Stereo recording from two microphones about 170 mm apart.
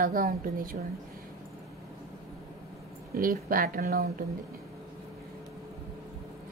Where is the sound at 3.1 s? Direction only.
55° right (ahead or behind).